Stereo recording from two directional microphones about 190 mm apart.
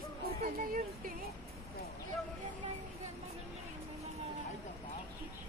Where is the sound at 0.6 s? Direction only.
50° right (ahead or behind).